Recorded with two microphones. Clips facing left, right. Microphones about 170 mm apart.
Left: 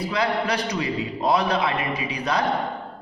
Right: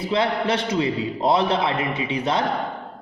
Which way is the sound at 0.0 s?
25° right (ahead or behind).